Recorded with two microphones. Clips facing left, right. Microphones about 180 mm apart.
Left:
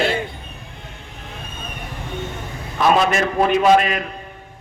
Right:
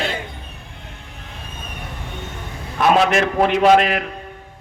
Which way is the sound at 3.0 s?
75° right (ahead or behind).